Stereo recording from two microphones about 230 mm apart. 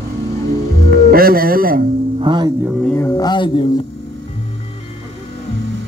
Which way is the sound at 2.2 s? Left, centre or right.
Right.